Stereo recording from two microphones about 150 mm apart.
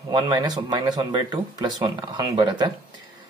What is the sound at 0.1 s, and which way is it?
Speech, 25° right (ahead or behind).